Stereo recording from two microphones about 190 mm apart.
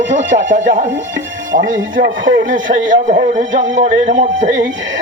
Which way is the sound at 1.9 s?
80° right.